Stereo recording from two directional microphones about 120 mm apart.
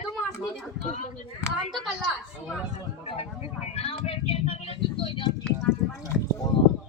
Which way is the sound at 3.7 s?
55° left (ahead or behind).